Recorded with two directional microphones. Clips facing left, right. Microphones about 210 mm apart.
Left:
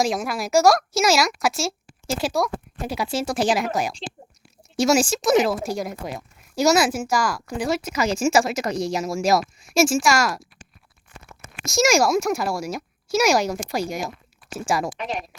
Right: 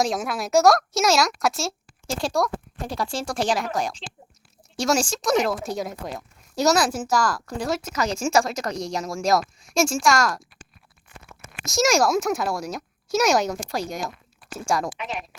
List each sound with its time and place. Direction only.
0.0 s a woman's voice: centre (ahead or behind)
11.7 s a woman's voice: centre (ahead or behind)
14.9 s a woman's voice: 35° left (ahead or behind)